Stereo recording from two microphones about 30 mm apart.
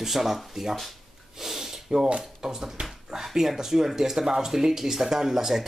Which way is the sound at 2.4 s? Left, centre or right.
Right.